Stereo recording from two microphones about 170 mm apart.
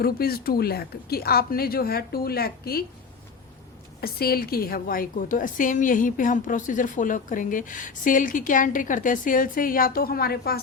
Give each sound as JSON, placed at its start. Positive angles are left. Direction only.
{"t": 0.0, "sound": "speech", "side_deg": 60}
{"t": 4.0, "sound": "a woman's voice", "side_deg": 65}